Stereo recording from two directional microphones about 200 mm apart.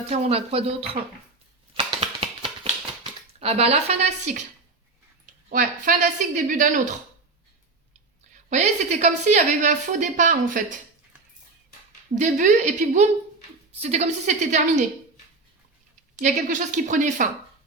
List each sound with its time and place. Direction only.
0.1 s speech: 30° right (ahead or behind)
1.7 s a sound: 25° right (ahead or behind)
3.4 s a woman's voice: 30° right (ahead or behind)
8.4 s a woman's voice: 35° right (ahead or behind)
12.1 s a woman's voice: 40° right (ahead or behind)
16.1 s a woman's voice: 40° right (ahead or behind)